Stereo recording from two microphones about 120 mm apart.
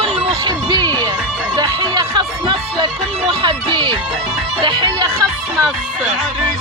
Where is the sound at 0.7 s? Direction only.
35° right (ahead or behind).